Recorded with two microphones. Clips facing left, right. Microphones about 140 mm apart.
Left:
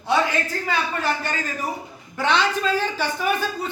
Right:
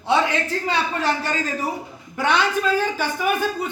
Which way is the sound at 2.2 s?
10° right (ahead or behind).